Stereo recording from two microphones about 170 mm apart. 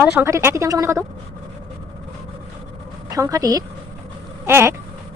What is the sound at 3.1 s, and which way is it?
Speech, 20° right (ahead or behind).